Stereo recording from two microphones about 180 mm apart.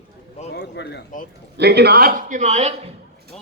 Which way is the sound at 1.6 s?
65° right (ahead or behind).